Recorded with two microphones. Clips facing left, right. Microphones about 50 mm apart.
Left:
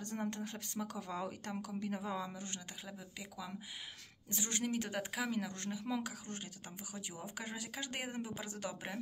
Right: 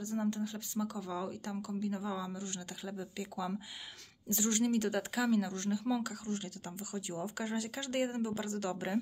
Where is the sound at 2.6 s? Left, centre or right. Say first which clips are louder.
Right 7 dB; centre.